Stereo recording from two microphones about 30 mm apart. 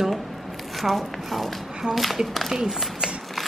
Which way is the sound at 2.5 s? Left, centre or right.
Centre.